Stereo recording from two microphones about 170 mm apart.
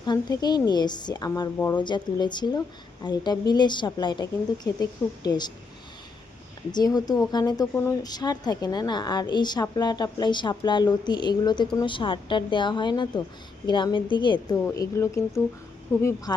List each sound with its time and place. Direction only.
0.0 s a woman's voice: 25° left (ahead or behind)
1.5 s speech: 15° left (ahead or behind)
1.8 s a woman's voice: 25° left (ahead or behind)
6.7 s a woman's voice: 25° left (ahead or behind)
14.7 s speech: 15° left (ahead or behind)